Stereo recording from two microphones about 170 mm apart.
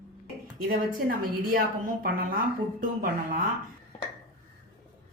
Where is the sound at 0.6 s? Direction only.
55° right (ahead or behind).